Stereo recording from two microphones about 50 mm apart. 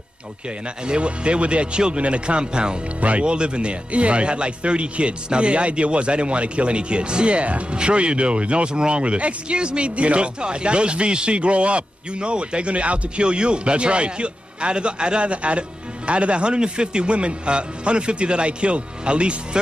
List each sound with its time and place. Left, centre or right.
0.8 s a man's voice: right